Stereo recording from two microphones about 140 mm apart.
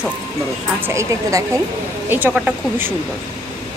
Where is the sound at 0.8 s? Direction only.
20° right (ahead or behind).